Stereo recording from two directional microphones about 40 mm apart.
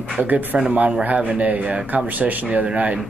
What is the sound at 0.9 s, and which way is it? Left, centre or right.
Speech, right.